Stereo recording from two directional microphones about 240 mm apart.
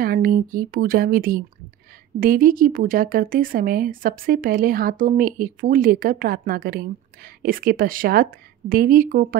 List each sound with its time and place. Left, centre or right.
0.0 s speech: right